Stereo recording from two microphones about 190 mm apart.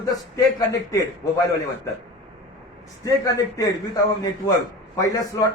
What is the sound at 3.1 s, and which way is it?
A man's voice, 20° left (ahead or behind).